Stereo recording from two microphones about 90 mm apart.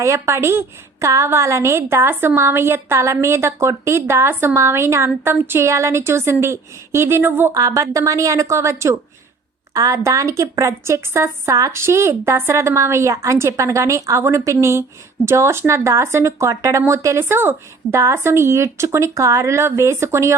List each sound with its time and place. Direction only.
0.0 s a woman's voice: 30° right (ahead or behind)
7.5 s a woman's voice: 40° right (ahead or behind)